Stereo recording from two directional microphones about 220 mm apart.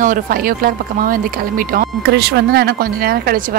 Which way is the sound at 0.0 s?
40° right (ahead or behind).